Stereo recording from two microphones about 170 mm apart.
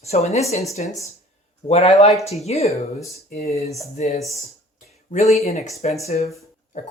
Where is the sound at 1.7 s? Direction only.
40° left (ahead or behind).